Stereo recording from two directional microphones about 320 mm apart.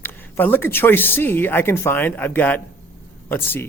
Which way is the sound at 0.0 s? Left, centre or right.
Centre.